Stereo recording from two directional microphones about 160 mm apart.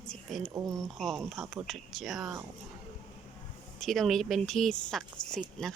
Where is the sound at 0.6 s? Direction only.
Centre (ahead or behind).